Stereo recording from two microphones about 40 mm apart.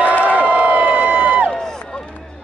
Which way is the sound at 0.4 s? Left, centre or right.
Right.